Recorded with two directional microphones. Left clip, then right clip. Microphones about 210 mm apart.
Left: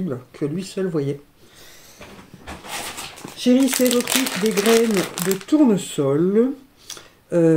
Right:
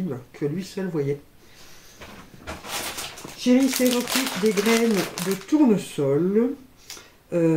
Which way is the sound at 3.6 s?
50° left (ahead or behind).